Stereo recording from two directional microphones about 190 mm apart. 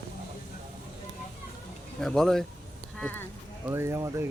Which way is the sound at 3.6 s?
15° right (ahead or behind).